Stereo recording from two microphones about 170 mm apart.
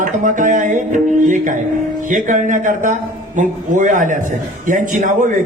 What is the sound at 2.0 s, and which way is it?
A man's voice, 50° right (ahead or behind).